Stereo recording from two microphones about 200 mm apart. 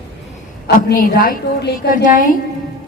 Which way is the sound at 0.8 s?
45° left (ahead or behind).